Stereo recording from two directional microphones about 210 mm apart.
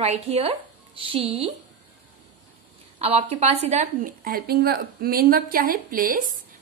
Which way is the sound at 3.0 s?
30° right (ahead or behind).